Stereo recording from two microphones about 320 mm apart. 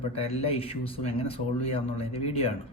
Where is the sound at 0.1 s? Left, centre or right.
Centre.